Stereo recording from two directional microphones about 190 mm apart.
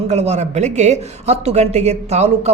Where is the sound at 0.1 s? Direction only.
35° right (ahead or behind).